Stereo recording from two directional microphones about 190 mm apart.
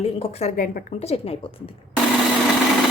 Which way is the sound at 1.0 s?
30° left (ahead or behind).